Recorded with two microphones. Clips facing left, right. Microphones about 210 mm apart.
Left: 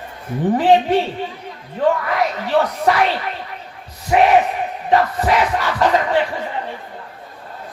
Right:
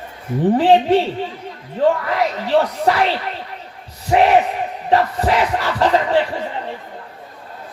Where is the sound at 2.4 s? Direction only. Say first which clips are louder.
Right 1 dB; 30° right (ahead or behind).